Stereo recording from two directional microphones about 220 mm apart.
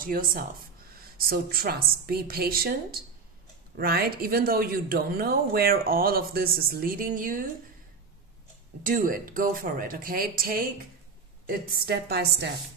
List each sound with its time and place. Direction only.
0.0 s speech: 40° right (ahead or behind)
8.8 s speech: 40° right (ahead or behind)
11.7 s a woman's voice: 45° right (ahead or behind)